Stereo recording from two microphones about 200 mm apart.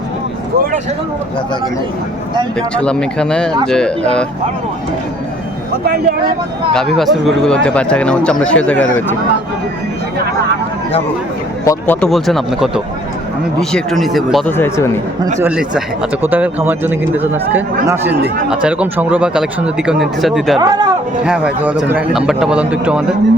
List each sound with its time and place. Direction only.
2.6 s speech: 5° left (ahead or behind)
5.8 s speech: 50° right (ahead or behind)
6.7 s speech: centre (ahead or behind)
11.6 s speech: 15° left (ahead or behind)
11.9 s speech: centre (ahead or behind)
14.5 s speech: 10° left (ahead or behind)
15.4 s speech: 5° right (ahead or behind)
20.6 s a man's voice: 20° right (ahead or behind)
21.2 s speech: 5° right (ahead or behind)